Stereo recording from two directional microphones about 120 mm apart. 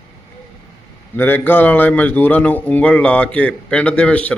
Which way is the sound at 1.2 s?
15° left (ahead or behind).